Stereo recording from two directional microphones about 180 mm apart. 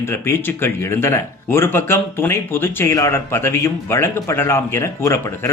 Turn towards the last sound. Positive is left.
turn(degrees=15)  # may be behind; listen again after turning